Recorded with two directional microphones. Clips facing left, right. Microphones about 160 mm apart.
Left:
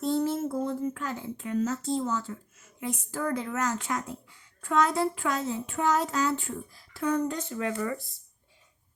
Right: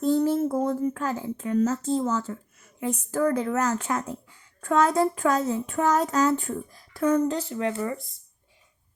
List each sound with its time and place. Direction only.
0.0 s speech: 40° right (ahead or behind)
7.3 s speech: 30° right (ahead or behind)